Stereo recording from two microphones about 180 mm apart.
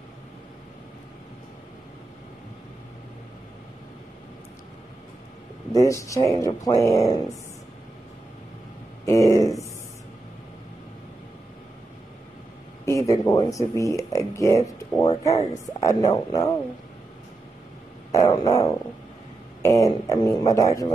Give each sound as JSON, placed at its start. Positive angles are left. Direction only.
{"t": 5.8, "sound": "speech", "side_deg": 15}
{"t": 9.0, "sound": "speech", "side_deg": 15}
{"t": 12.8, "sound": "speech", "side_deg": 20}
{"t": 18.1, "sound": "speech", "side_deg": 20}